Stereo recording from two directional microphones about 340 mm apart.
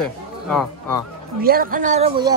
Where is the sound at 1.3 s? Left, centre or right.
Right.